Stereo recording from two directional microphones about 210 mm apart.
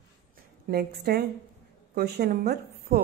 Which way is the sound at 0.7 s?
50° right (ahead or behind).